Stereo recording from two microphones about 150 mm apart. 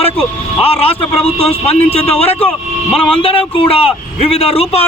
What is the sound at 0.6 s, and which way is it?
A man's voice, 40° left (ahead or behind).